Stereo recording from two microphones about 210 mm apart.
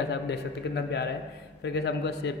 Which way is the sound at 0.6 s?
55° left (ahead or behind).